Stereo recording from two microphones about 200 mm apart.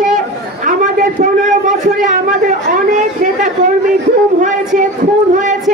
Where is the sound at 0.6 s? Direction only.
40° right (ahead or behind).